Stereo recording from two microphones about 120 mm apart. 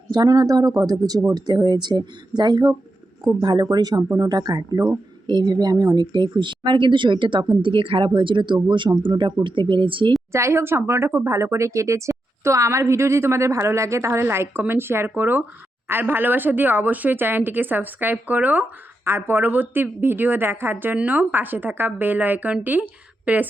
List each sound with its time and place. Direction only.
0.1 s speech: 30° right (ahead or behind)
10.3 s a woman's voice: 20° right (ahead or behind)